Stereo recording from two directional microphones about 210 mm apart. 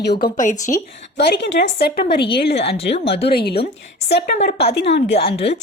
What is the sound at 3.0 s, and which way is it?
Speech, 55° left (ahead or behind).